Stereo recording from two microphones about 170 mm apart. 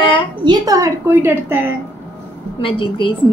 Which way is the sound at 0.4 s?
25° right (ahead or behind).